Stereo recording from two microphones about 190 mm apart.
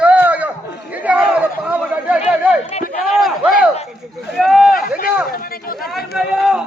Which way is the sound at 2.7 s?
35° left (ahead or behind).